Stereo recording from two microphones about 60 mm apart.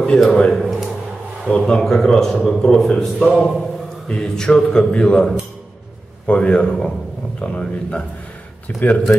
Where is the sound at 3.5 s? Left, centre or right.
Centre.